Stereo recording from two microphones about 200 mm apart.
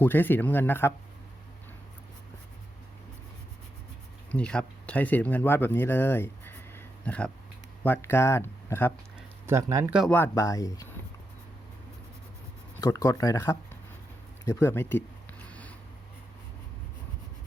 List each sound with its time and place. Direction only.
0.0 s speech: 10° left (ahead or behind)
4.3 s speech: 5° left (ahead or behind)
9.5 s speech: 15° right (ahead or behind)
10.0 s speech: 10° left (ahead or behind)
12.8 s speech: 15° left (ahead or behind)
14.4 s a sound: 15° left (ahead or behind)